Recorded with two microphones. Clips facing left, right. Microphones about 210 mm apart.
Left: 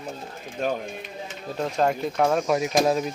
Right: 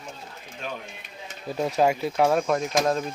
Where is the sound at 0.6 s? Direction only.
45° left (ahead or behind).